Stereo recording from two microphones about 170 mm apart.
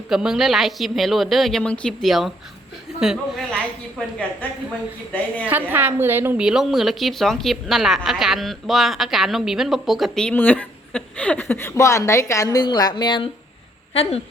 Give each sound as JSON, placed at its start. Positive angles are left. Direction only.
{"t": 0.1, "sound": "a woman's voice", "side_deg": -5}
{"t": 5.5, "sound": "a woman's voice", "side_deg": -10}